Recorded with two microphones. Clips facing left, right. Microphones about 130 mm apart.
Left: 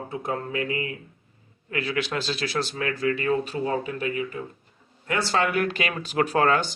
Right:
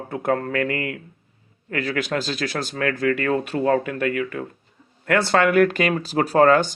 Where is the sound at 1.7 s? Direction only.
45° right (ahead or behind); by 4.4 s 80° right.